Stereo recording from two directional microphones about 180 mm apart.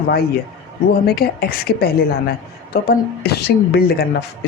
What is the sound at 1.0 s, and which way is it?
Speech, 60° left (ahead or behind).